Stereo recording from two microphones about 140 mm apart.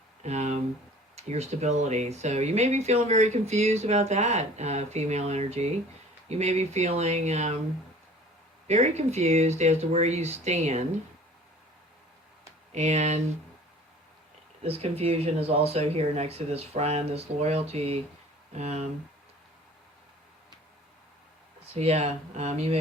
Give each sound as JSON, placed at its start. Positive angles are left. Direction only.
{"t": 0.2, "sound": "a sound", "side_deg": -55}
{"t": 1.1, "sound": "speech", "side_deg": -50}
{"t": 8.6, "sound": "speech", "side_deg": -50}
{"t": 12.7, "sound": "speech", "side_deg": -50}
{"t": 14.6, "sound": "speech", "side_deg": -45}
{"t": 21.8, "sound": "speech", "side_deg": -50}